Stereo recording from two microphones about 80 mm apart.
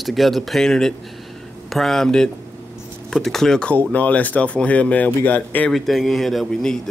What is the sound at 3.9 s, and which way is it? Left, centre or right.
Speech, centre.